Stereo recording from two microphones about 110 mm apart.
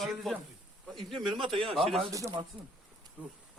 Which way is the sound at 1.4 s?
55° right (ahead or behind).